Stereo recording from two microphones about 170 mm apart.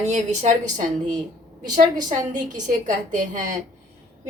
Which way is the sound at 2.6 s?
50° right (ahead or behind).